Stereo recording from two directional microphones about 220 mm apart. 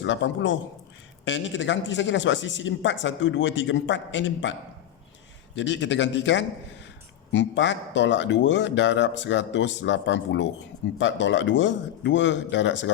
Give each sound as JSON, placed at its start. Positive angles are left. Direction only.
{"t": 0.0, "sound": "a man's voice", "side_deg": 55}
{"t": 5.5, "sound": "a man's voice", "side_deg": 55}